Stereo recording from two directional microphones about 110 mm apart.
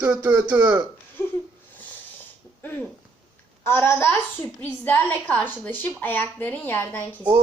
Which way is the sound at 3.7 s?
20° left (ahead or behind).